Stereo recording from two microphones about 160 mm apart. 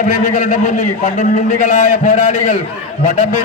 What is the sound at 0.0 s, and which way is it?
A man's voice, 55° left (ahead or behind).